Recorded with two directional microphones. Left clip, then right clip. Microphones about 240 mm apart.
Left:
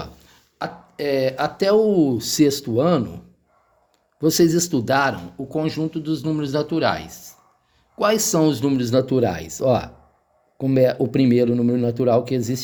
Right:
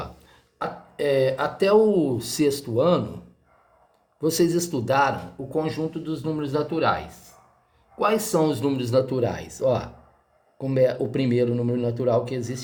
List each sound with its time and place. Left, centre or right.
0.6 s speech: left
4.2 s speech: left